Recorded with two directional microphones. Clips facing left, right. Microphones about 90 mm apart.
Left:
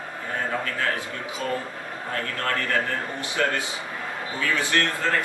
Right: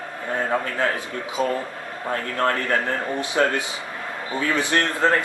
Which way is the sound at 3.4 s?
30° right (ahead or behind).